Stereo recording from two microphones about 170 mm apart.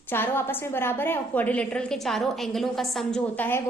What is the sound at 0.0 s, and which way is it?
A woman's voice, 10° left (ahead or behind).